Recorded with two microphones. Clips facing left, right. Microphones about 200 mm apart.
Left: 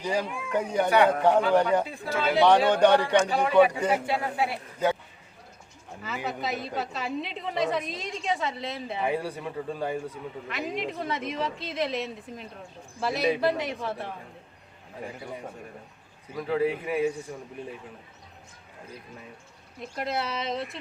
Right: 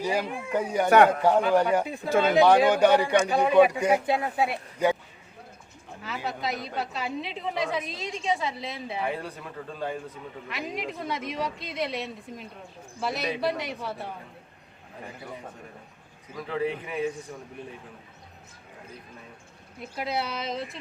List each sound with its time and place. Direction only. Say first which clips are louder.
0.0 s speech: right 1 dB; 10° right (ahead or behind)
0.9 s a man's voice: right 4 dB; 50° right (ahead or behind)
1.2 s speech: even; 10° right (ahead or behind)
6.2 s a woman's voice: even; centre (ahead or behind)
9.0 s speech: left 4 dB; 10° left (ahead or behind)
10.5 s a woman's voice: left 2 dB; centre (ahead or behind)
16.3 s speech: left 3 dB; 10° left (ahead or behind)
19.8 s a woman's voice: even; centre (ahead or behind)